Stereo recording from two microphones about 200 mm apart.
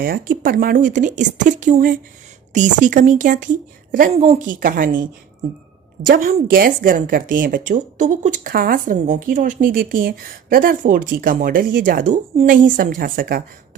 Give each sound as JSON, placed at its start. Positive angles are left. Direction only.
{"t": 0.0, "sound": "a woman's voice", "side_deg": -45}